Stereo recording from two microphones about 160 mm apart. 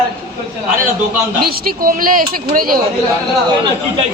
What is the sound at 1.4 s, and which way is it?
Speech, 65° right (ahead or behind).